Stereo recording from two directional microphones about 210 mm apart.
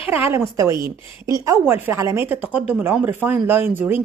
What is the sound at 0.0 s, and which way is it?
A woman's voice, 10° right (ahead or behind).